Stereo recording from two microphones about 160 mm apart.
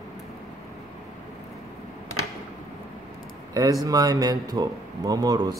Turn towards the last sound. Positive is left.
turn(degrees=-25)  # may be behind; listen again after turning